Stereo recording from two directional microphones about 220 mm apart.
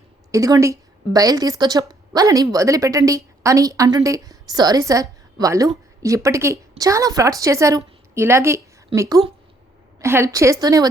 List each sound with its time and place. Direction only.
0.3 s a woman's voice: 15° right (ahead or behind)